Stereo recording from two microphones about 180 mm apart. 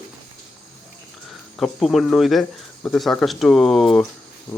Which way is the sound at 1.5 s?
Centre (ahead or behind).